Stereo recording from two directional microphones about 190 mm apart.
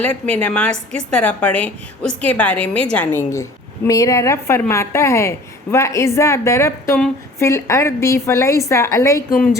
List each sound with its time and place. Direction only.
0.0 s a woman's voice: 10° left (ahead or behind)
9.3 s a woman's voice: centre (ahead or behind)